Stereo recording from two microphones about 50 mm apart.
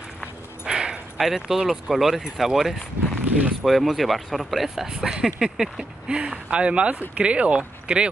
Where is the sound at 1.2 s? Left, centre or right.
Centre.